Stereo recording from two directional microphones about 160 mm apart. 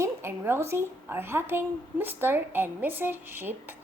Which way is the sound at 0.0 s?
15° right (ahead or behind).